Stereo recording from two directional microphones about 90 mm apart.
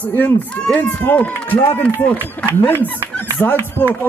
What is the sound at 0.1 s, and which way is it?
Speech, 20° left (ahead or behind).